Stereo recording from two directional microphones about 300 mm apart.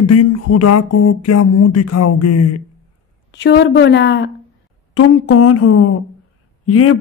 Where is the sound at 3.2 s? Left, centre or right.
Left.